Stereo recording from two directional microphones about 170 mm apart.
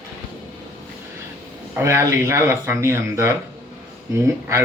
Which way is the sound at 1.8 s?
15° right (ahead or behind).